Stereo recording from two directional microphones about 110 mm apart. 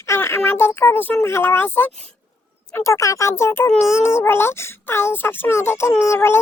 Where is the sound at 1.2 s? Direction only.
20° left (ahead or behind).